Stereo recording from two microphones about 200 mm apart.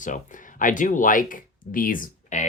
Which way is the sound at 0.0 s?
40° left (ahead or behind).